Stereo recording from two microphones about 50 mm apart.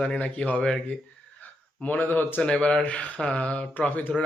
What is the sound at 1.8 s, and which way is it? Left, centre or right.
Speech, left.